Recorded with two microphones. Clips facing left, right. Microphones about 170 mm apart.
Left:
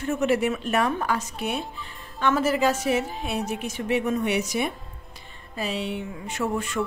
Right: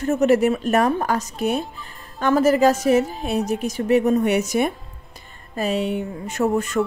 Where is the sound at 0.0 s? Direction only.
40° right (ahead or behind).